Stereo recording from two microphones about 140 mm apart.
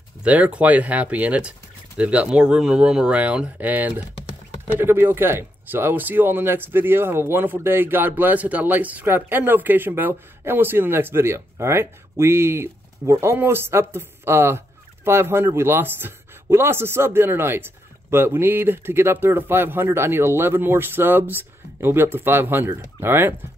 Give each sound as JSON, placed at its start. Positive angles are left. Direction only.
{"t": 0.2, "sound": "speech", "side_deg": -10}